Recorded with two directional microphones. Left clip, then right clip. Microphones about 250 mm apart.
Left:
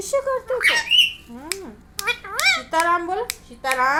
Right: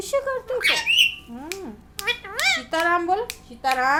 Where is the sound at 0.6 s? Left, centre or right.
Centre.